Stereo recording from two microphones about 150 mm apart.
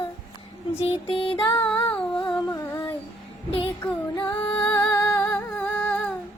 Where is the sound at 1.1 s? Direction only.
35° left (ahead or behind).